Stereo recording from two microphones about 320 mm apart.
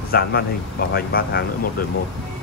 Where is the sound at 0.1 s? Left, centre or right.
Left.